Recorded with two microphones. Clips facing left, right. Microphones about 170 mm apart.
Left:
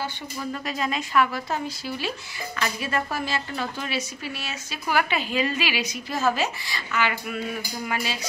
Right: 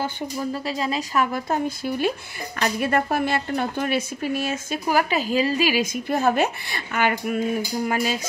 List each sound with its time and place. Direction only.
0.5 s speech: 30° right (ahead or behind)